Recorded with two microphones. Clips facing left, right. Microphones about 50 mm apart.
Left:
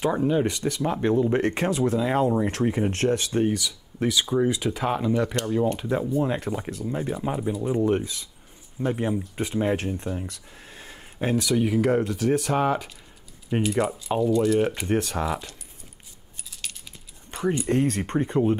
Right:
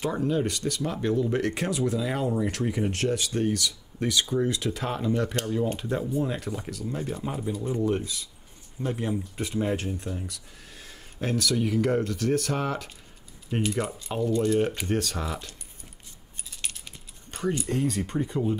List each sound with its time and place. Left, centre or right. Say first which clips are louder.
0.0 s speech: left 4 dB; centre
3.4 s speech: left 2 dB; centre
6.2 s speech: left 4 dB; left
17.6 s speech: left 4 dB; left